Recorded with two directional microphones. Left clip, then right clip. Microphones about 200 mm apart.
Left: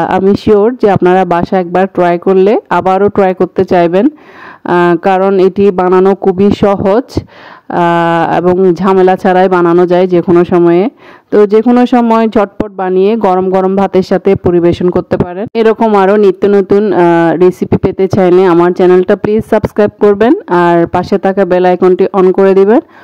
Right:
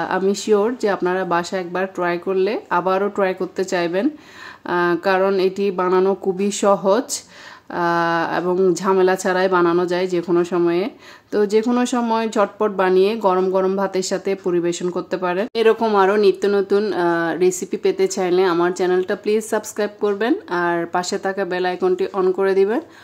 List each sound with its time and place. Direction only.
0.0 s speech: 45° left (ahead or behind)